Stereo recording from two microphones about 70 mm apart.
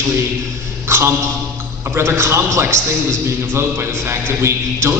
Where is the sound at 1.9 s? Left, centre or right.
Right.